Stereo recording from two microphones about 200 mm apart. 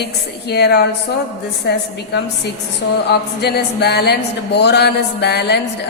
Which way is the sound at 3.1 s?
55° left (ahead or behind).